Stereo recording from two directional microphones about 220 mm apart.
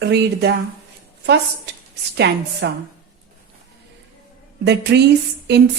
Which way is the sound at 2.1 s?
50° right (ahead or behind).